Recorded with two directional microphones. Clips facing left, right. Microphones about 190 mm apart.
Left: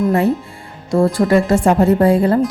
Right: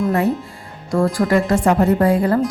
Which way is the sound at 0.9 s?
25° left (ahead or behind).